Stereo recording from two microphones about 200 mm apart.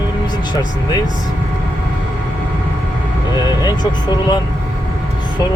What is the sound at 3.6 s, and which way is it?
Speech, 20° left (ahead or behind).